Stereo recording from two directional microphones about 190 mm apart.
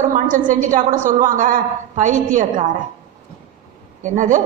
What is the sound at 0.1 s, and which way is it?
A woman's voice, 45° right (ahead or behind).